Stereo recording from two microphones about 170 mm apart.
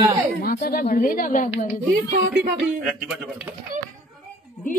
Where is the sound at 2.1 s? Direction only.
70° right (ahead or behind).